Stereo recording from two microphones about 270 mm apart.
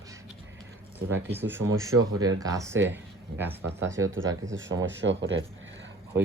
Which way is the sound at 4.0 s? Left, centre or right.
Right.